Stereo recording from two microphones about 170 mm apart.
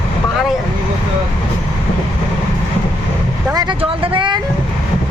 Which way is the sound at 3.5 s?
25° right (ahead or behind).